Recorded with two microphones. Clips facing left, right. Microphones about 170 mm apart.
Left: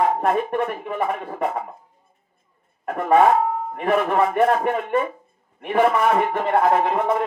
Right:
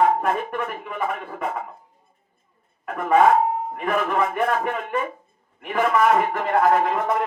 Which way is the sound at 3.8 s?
35° left (ahead or behind).